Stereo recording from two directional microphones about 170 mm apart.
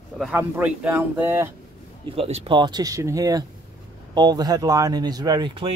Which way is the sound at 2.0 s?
35° right (ahead or behind).